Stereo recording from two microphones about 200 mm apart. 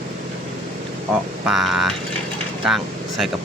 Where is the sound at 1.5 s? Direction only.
Centre (ahead or behind).